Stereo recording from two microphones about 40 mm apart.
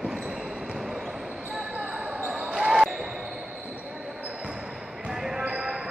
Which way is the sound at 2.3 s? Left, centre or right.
Centre.